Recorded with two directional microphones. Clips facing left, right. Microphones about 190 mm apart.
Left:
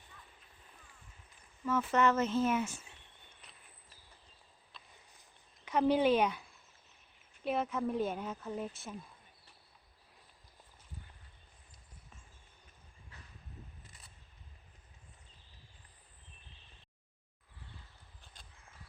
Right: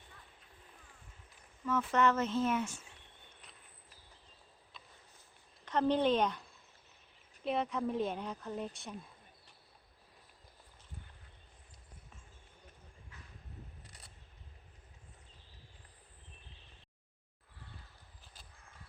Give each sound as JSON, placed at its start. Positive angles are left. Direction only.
{"t": 1.6, "sound": "speech", "side_deg": 5}
{"t": 5.6, "sound": "speech", "side_deg": 10}
{"t": 7.4, "sound": "speech", "side_deg": 0}